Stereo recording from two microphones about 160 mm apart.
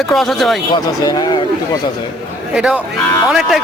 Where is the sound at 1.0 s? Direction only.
25° left (ahead or behind).